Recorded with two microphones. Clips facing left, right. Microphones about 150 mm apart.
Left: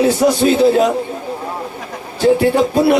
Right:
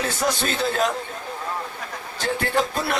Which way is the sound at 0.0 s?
20° left (ahead or behind).